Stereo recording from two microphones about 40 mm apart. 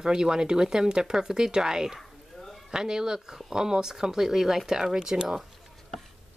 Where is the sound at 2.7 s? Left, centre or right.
Centre.